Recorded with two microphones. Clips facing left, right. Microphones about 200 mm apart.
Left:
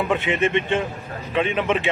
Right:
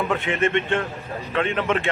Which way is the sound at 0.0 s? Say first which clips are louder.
Left 1 dB; 15° left (ahead or behind).